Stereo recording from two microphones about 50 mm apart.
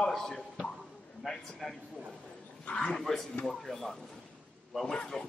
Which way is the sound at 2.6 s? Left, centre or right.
Left.